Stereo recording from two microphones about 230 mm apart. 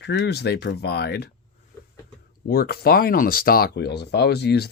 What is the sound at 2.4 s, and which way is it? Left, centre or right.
Speech, left.